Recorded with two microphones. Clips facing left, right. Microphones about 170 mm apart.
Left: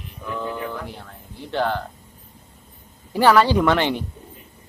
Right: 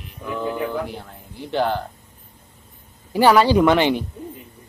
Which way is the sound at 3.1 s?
10° right (ahead or behind).